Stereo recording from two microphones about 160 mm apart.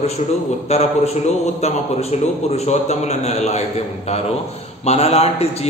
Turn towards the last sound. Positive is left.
turn(degrees=40)  # may be behind; listen again after turning